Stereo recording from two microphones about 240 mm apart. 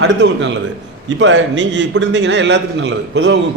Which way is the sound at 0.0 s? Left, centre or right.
Right.